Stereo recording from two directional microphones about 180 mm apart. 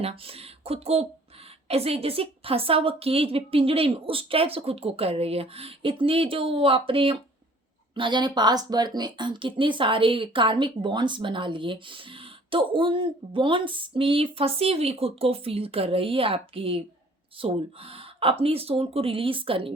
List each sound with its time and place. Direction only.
0.0 s a woman's voice: 30° right (ahead or behind)